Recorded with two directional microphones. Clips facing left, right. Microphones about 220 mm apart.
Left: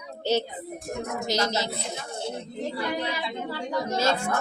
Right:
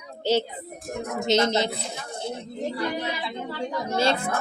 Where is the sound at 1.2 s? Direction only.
20° right (ahead or behind).